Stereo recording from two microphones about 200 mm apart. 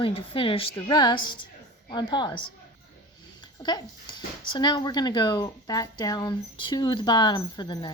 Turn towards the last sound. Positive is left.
turn(degrees=20)  # may be behind; listen again after turning